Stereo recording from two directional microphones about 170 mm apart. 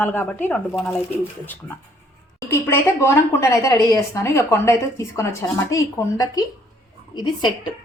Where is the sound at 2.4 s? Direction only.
15° left (ahead or behind).